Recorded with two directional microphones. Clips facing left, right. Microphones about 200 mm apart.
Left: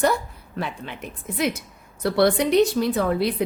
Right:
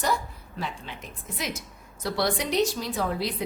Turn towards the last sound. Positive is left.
turn(degrees=60)  # may be behind; listen again after turning